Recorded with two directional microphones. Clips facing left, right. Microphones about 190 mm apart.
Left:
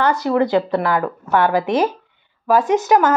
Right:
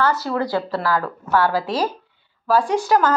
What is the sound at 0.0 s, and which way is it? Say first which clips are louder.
A woman's voice: left 4 dB; 15° left (ahead or behind).